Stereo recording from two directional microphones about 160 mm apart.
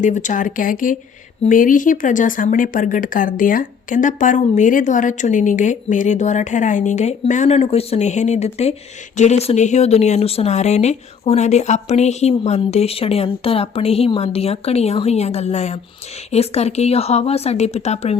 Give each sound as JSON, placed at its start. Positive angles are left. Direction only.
{"t": 0.0, "sound": "a woman's voice", "side_deg": 50}